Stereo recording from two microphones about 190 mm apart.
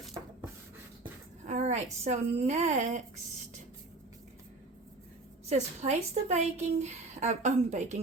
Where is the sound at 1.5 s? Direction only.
40° right (ahead or behind).